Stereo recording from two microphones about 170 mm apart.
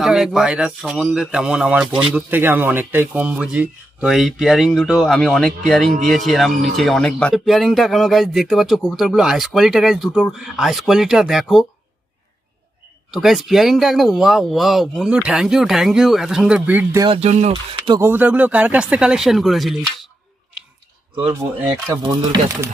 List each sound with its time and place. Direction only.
0.0 s speech: centre (ahead or behind)
13.1 s speech: centre (ahead or behind)
17.0 s speech: 35° right (ahead or behind)
17.5 s speech: 25° right (ahead or behind)
18.0 s speech: 10° right (ahead or behind)